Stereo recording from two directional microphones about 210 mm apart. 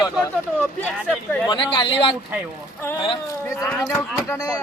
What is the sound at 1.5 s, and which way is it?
Speech, 20° left (ahead or behind).